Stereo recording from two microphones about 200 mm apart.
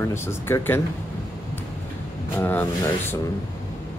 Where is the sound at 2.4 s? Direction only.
10° left (ahead or behind).